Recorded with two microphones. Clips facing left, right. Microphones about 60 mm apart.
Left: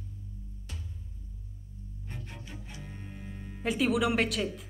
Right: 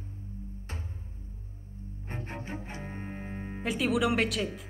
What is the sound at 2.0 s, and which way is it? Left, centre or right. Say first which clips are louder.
Cello: right 6 dB; right.